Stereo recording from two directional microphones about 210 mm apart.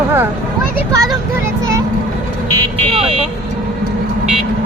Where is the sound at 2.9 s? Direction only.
30° right (ahead or behind).